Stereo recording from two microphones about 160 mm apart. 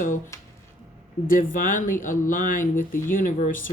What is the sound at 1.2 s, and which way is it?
Speech, 60° left (ahead or behind).